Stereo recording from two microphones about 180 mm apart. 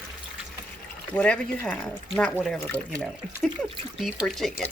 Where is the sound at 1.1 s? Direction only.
5° left (ahead or behind).